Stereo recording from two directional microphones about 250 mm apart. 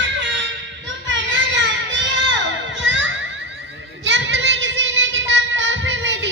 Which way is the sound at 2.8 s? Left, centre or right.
Right.